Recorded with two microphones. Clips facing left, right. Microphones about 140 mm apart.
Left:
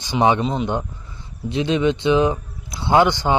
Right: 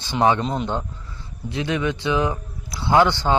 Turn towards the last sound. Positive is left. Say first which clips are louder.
# left 1 dB
turn(degrees=15)  # may be behind; listen again after turning